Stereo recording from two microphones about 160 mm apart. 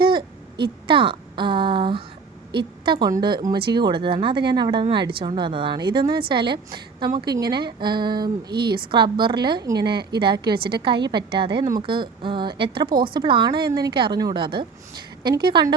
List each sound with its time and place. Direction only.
0.0 s a woman's voice: 30° right (ahead or behind)